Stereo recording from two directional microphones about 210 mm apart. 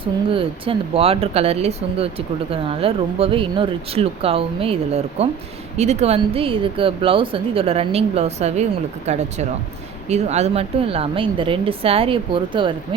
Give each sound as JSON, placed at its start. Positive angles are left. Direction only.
{"t": 0.0, "sound": "speech", "side_deg": -25}